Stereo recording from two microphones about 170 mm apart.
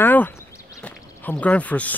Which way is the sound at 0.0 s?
10° left (ahead or behind).